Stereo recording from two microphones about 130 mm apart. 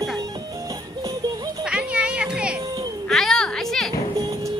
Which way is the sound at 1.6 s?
5° right (ahead or behind).